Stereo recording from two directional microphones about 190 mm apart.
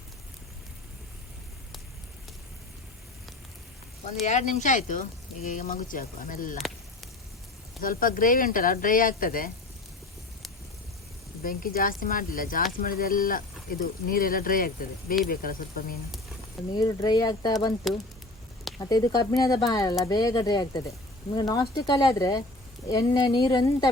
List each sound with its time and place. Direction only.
4.0 s speech: 35° left (ahead or behind)
7.8 s speech: 45° left (ahead or behind)
11.4 s speech: 50° left (ahead or behind)
16.7 s speech: 20° left (ahead or behind)
18.8 s speech: 20° left (ahead or behind)